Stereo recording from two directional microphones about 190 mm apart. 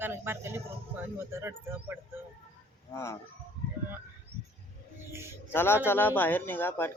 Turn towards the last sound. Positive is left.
turn(degrees=10)  # may be behind; listen again after turning